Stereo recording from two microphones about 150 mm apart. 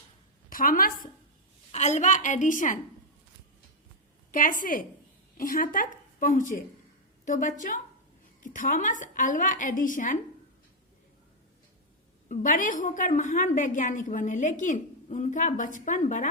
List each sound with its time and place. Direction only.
0.5 s a woman's voice: 70° left (ahead or behind)
1.7 s a woman's voice: 50° left (ahead or behind)
4.3 s a woman's voice: 65° left (ahead or behind)
12.3 s a woman's voice: 60° left (ahead or behind)